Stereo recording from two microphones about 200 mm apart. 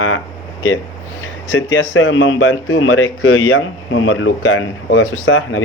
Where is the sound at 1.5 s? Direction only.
65° left (ahead or behind).